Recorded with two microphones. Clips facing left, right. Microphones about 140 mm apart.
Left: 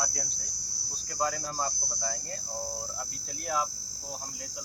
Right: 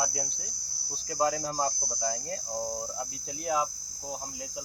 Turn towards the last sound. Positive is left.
turn(degrees=-20)  # may be behind; listen again after turning